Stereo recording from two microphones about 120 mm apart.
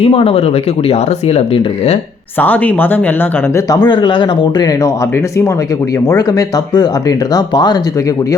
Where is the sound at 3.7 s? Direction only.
35° left (ahead or behind).